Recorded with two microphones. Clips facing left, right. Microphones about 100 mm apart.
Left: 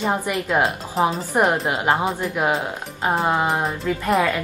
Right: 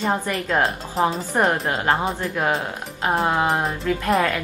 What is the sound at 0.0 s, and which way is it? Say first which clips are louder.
Speech: left 1 dB; 10° left (ahead or behind).